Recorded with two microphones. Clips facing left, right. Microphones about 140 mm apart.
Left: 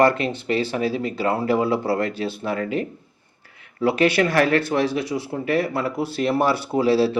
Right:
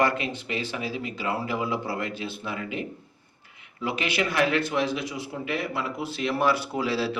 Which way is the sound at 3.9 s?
40° left (ahead or behind).